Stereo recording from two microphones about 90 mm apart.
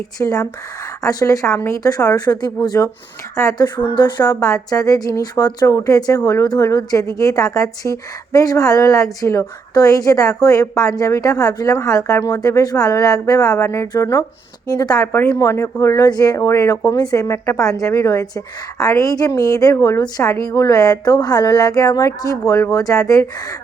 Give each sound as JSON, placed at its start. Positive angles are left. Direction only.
{"t": 0.2, "sound": "speech", "side_deg": 40}
{"t": 3.9, "sound": "speech", "side_deg": 50}
{"t": 15.0, "sound": "speech", "side_deg": 30}